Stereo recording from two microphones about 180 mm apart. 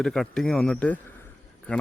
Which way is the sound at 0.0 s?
Centre (ahead or behind).